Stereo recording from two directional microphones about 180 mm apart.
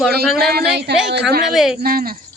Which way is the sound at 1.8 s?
55° right (ahead or behind).